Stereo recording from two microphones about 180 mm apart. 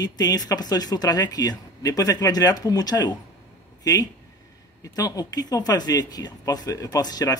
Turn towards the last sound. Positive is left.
turn(degrees=20)  # may be behind; listen again after turning